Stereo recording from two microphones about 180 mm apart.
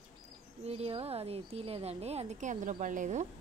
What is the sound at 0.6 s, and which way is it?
Speech, 35° right (ahead or behind).